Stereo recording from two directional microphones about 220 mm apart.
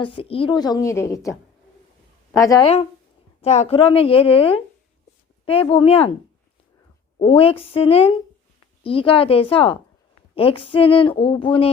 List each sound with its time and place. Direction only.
0.0 s a woman's voice: 25° left (ahead or behind)
2.4 s a woman's voice: 15° left (ahead or behind)
3.4 s speech: 30° left (ahead or behind)
7.2 s speech: 25° left (ahead or behind)